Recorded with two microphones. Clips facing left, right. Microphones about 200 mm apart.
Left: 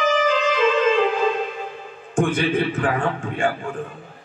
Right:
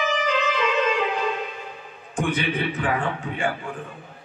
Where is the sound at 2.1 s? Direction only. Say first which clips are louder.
Left 5 dB; 50° left (ahead or behind).